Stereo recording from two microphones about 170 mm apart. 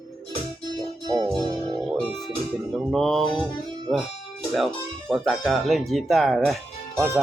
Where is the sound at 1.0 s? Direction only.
20° right (ahead or behind).